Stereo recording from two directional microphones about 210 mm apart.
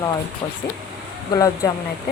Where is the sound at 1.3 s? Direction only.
15° left (ahead or behind).